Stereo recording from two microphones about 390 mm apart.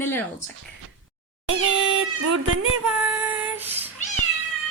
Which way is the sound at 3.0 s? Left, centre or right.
Centre.